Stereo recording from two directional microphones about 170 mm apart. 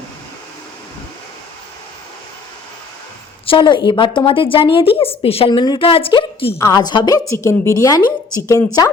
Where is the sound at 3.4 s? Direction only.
30° left (ahead or behind).